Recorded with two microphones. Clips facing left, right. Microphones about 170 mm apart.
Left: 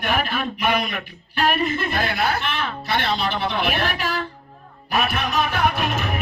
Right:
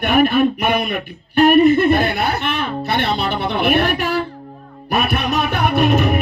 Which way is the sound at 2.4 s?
55° right (ahead or behind).